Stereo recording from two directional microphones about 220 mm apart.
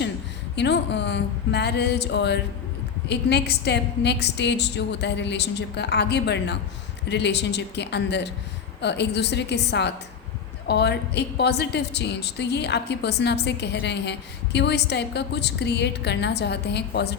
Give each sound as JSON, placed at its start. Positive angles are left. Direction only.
{"t": 0.5, "sound": "a woman's voice", "side_deg": 50}